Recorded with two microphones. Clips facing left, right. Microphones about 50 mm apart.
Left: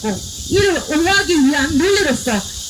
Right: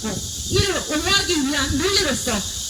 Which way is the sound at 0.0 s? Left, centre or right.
Left.